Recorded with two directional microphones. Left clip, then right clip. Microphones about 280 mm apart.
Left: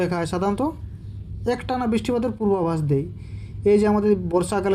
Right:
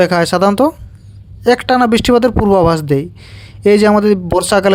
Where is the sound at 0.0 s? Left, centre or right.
Right.